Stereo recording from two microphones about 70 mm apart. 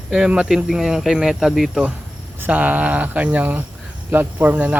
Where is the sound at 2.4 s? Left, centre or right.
Right.